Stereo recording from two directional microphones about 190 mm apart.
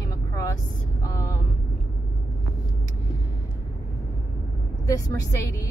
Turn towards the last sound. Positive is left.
turn(degrees=15)  # may be behind; listen again after turning